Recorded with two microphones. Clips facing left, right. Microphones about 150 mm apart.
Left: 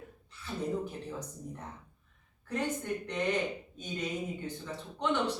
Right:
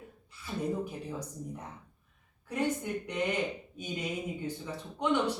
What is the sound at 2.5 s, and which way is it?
Speech, 10° right (ahead or behind).